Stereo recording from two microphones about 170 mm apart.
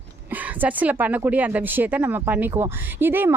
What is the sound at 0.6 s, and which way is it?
Speech, 10° right (ahead or behind).